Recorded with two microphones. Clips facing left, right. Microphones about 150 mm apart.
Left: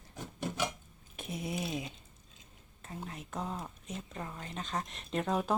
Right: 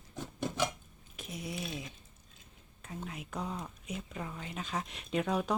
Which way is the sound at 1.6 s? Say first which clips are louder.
Left 4 dB; 20° left (ahead or behind).